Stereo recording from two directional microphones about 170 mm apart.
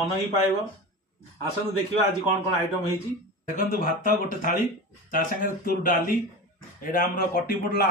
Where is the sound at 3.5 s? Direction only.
50° left (ahead or behind).